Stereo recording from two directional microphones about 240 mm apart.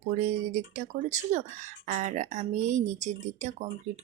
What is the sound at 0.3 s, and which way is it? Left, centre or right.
Speech, right.